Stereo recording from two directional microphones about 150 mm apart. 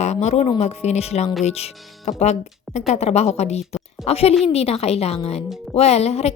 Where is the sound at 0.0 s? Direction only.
50° left (ahead or behind).